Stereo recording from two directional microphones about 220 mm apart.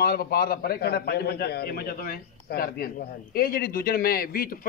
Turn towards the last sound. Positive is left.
turn(degrees=40)  # may be behind; listen again after turning